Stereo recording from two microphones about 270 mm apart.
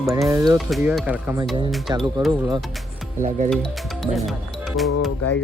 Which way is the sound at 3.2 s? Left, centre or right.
Right.